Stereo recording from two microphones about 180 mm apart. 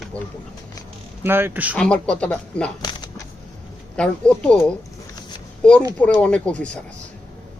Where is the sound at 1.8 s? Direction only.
5° left (ahead or behind).